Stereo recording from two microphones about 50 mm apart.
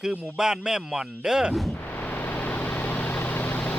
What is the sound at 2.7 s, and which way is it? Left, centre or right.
Vehicle, left.